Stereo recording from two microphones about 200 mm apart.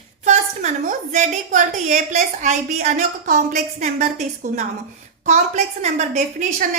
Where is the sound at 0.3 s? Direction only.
35° right (ahead or behind).